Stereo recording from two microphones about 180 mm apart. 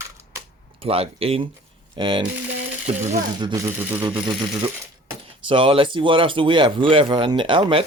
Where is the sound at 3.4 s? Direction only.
20° right (ahead or behind).